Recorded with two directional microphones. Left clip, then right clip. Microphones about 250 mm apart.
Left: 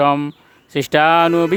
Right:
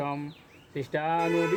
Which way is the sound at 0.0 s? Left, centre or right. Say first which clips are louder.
Left 18 dB; left.